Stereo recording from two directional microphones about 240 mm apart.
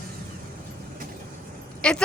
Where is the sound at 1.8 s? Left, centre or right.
Centre.